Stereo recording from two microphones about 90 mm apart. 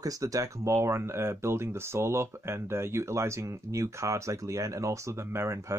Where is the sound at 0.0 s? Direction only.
40° right (ahead or behind).